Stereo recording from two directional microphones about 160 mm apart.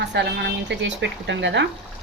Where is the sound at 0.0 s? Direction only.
90° right.